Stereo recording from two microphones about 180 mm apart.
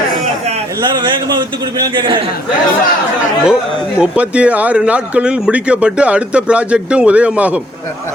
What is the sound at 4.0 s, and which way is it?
Speech, 5° right (ahead or behind).